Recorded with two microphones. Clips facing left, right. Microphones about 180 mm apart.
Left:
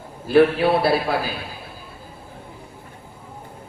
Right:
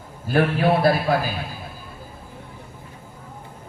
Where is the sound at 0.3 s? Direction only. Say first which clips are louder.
Left 4 dB; 45° right (ahead or behind).